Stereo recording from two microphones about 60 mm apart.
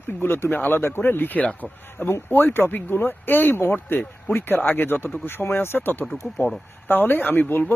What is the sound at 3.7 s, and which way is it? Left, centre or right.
Speech, left.